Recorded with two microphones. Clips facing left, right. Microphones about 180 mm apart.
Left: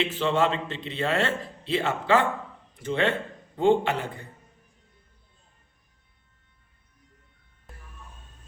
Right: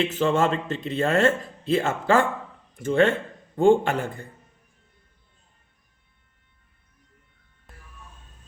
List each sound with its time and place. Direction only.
0.0 s speech: 45° right (ahead or behind)